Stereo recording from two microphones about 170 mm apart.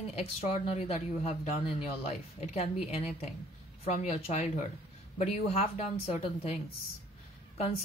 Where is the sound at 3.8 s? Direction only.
40° left (ahead or behind).